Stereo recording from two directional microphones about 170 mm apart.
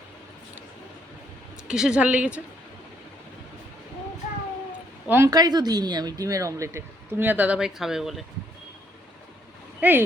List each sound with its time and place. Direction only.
1.6 s a woman's voice: 5° right (ahead or behind)
5.0 s a woman's voice: 15° right (ahead or behind)
9.8 s a woman's voice: 10° right (ahead or behind)